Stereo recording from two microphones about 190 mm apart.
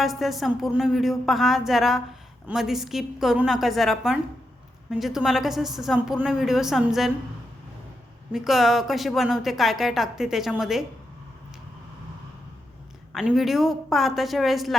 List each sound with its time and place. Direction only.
0.0 s a woman's voice: centre (ahead or behind)
8.3 s a woman's voice: centre (ahead or behind)
13.1 s a woman's voice: centre (ahead or behind)